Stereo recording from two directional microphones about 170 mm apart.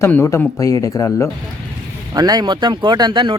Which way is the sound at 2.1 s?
25° right (ahead or behind).